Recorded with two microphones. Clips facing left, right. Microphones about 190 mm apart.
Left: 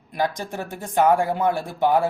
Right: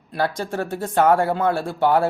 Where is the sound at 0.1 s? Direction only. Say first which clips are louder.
Right 2 dB; 15° left (ahead or behind).